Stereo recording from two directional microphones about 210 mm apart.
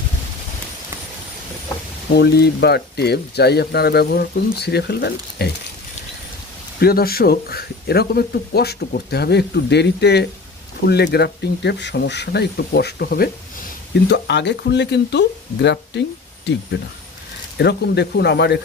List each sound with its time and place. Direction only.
2.1 s speech: 50° left (ahead or behind)
6.8 s speech: 45° left (ahead or behind)
17.6 s speech: 50° left (ahead or behind)